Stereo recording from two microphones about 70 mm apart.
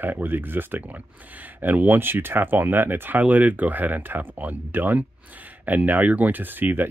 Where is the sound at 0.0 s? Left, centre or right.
Right.